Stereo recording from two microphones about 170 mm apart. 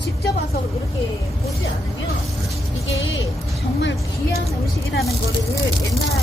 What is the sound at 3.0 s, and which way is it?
Speech, 90° left.